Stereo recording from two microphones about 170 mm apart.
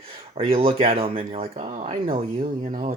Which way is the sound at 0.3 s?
35° right (ahead or behind).